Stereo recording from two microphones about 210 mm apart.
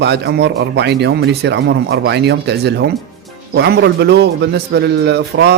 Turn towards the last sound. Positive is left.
turn(degrees=-55)  # may be behind; listen again after turning